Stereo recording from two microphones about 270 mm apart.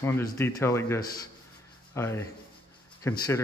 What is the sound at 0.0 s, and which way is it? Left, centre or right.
Speech, centre.